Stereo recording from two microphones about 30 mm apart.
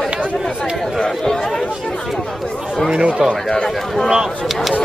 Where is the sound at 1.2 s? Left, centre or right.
Centre.